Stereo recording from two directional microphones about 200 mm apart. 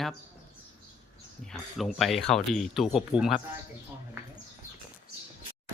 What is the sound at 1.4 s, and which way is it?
Speech, centre (ahead or behind).